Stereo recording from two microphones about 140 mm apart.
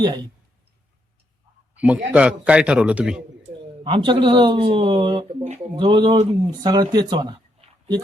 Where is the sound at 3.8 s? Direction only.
35° right (ahead or behind).